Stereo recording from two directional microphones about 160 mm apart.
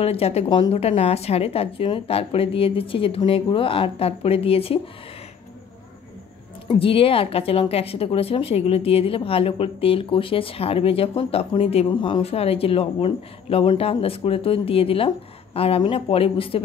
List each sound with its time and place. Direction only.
0.0 s speech: 40° left (ahead or behind)
6.7 s speech: 35° left (ahead or behind)